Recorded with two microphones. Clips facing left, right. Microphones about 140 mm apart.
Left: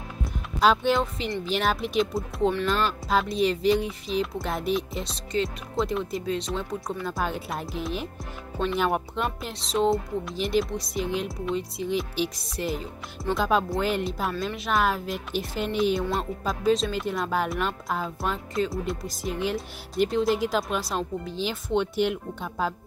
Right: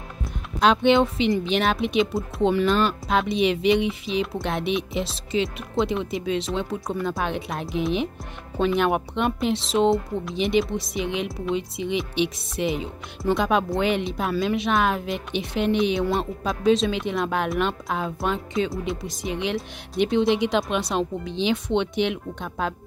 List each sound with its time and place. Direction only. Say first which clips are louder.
0.2 s music: right 1 dB; centre (ahead or behind)
1.6 s speech: right 3 dB; centre (ahead or behind)
15.3 s speech: right 6 dB; 65° right (ahead or behind)
15.8 s speech: right 2 dB; centre (ahead or behind)